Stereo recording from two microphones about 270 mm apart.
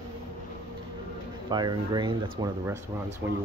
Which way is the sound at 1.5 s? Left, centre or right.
Centre.